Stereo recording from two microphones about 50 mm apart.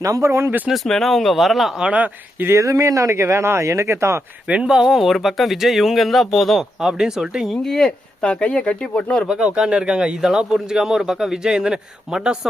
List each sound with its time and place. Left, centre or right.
0.2 s speech: right
0.9 s speech: centre
2.5 s speech: right
4.4 s speech: right
4.7 s a man's voice: centre
6.7 s a man's voice: centre
7.5 s speech: centre
8.2 s speech: left
9.2 s a man's voice: centre